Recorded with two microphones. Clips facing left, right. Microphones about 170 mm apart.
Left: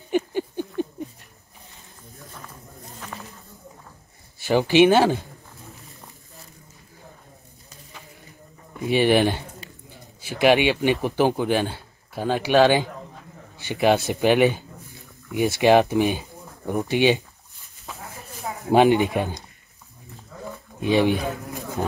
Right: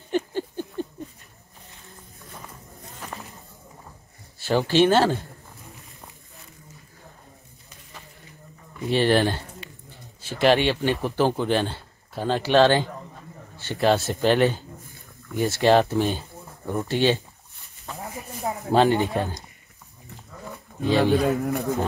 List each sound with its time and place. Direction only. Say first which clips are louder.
0.1 s a sound: left 2 dB; 15° left (ahead or behind)
4.5 s speech: left 3 dB; 15° left (ahead or behind)
8.8 s speech: left 2 dB; 15° left (ahead or behind)
17.9 s a sound: right 3 dB; 5° left (ahead or behind)
18.7 s speech: left 3 dB; 15° left (ahead or behind)
20.8 s speech: even; 15° left (ahead or behind)
21.4 s speech: right 9 dB; 65° right (ahead or behind)